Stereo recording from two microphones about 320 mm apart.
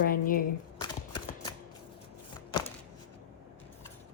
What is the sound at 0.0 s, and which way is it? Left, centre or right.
Speech, left.